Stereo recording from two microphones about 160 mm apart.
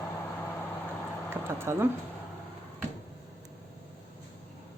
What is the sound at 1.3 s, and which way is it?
Speech, 15° right (ahead or behind).